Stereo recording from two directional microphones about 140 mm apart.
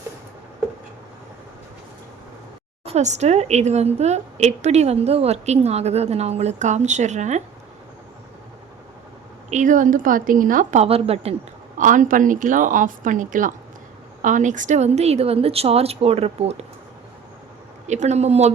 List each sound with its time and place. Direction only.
2.8 s a woman's voice: 55° right (ahead or behind)
9.5 s speech: 65° right (ahead or behind); by 11.3 s 45° right (ahead or behind)
11.8 s a woman's voice: 70° right (ahead or behind); by 16.6 s 45° right (ahead or behind)
17.8 s a woman's voice: 55° right (ahead or behind)